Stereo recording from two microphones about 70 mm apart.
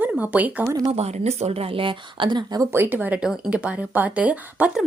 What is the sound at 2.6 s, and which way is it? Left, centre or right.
Speech, right.